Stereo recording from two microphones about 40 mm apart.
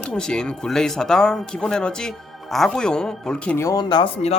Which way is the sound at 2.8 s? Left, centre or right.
Centre.